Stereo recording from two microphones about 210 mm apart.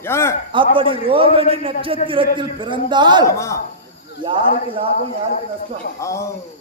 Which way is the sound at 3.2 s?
15° left (ahead or behind).